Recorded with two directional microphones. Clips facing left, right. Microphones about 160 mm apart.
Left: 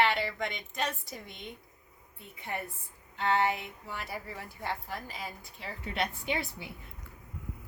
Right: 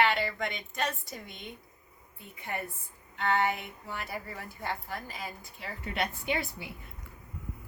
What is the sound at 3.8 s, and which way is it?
A woman's voice, centre (ahead or behind).